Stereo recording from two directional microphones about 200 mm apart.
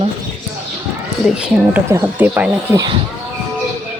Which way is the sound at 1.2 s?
5° right (ahead or behind).